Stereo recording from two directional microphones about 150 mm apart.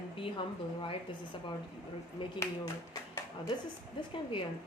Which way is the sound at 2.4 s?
20° left (ahead or behind).